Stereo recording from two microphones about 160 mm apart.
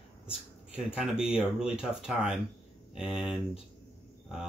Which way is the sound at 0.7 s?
5° right (ahead or behind).